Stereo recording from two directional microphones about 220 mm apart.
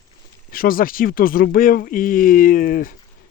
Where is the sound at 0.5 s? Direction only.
40° left (ahead or behind).